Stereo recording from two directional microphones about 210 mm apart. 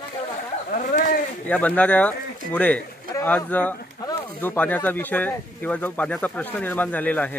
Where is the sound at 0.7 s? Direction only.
40° left (ahead or behind).